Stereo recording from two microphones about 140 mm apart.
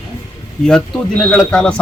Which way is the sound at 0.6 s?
5° left (ahead or behind).